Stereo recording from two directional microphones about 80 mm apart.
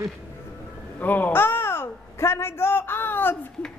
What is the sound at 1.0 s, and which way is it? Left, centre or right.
A child's voice, left.